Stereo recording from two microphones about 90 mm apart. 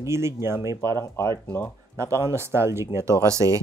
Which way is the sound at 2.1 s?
30° right (ahead or behind).